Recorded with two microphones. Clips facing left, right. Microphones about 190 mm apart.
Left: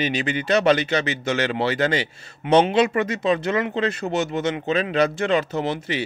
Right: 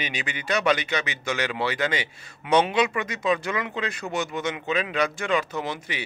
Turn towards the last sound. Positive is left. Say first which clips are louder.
# left 6 dB
turn(degrees=30)  # may be behind; listen again after turning